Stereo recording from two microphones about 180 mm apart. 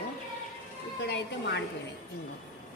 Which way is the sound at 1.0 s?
70° left (ahead or behind).